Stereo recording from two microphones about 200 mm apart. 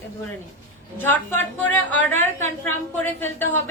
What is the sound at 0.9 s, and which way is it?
A woman's voice, 10° left (ahead or behind).